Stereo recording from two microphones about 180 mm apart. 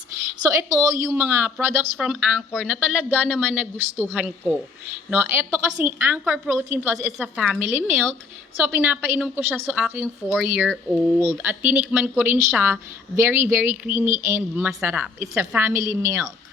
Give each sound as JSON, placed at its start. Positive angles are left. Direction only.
{"t": 0.4, "sound": "speech", "side_deg": -15}